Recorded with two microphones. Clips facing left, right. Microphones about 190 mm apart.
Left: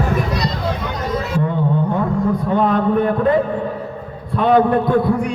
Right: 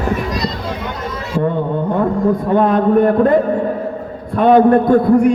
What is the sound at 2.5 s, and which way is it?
A man's voice, 50° right (ahead or behind).